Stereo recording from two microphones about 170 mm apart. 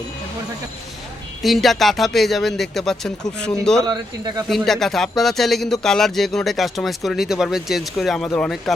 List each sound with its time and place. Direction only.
1.4 s speech: centre (ahead or behind)
3.8 s speech: 25° right (ahead or behind)
4.4 s speech: centre (ahead or behind)